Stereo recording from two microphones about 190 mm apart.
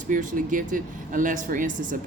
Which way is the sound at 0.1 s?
45° right (ahead or behind).